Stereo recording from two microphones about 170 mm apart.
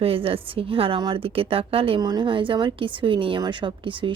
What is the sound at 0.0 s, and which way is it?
A woman's voice, 35° right (ahead or behind).